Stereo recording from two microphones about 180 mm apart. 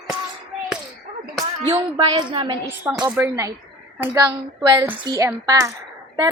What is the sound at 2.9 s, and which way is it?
A woman's voice, 10° right (ahead or behind).